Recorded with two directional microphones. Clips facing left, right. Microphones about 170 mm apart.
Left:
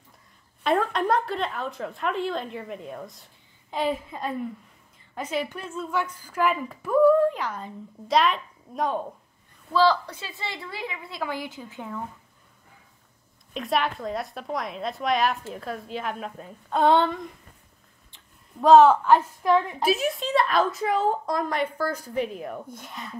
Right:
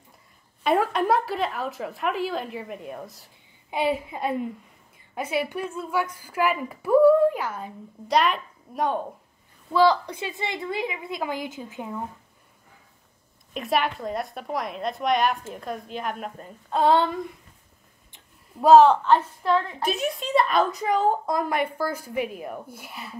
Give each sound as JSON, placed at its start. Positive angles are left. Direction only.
{"t": 0.7, "sound": "a woman's voice", "side_deg": -5}
{"t": 9.7, "sound": "a woman's voice", "side_deg": -15}
{"t": 13.5, "sound": "a woman's voice", "side_deg": 0}
{"t": 18.1, "sound": "a sound", "side_deg": -5}
{"t": 19.0, "sound": "a woman's voice", "side_deg": 10}